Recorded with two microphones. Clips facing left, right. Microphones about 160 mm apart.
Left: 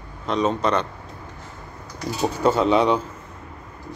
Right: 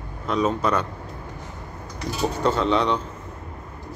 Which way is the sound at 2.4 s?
10° left (ahead or behind).